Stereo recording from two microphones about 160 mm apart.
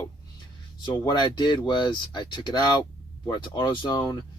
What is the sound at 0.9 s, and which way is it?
Speech, 25° left (ahead or behind).